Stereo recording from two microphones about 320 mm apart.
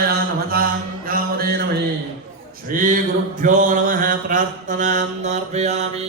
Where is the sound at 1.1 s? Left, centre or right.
Right.